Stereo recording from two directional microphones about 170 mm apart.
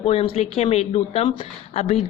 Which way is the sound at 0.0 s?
35° left (ahead or behind).